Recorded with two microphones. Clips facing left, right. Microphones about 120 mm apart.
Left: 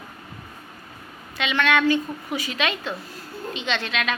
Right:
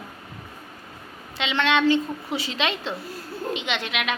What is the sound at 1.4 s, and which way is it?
A woman's voice, 20° right (ahead or behind).